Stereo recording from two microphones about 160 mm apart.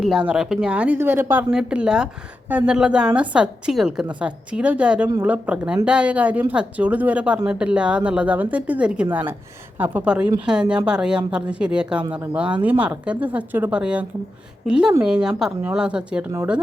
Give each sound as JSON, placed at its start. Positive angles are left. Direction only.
{"t": 0.0, "sound": "a woman's voice", "side_deg": -5}